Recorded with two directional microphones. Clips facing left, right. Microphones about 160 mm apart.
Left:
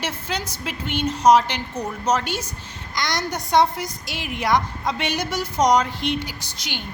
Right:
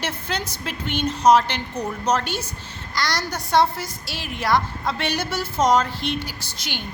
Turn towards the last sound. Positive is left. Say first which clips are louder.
# even
turn(degrees=15)  # may be behind; listen again after turning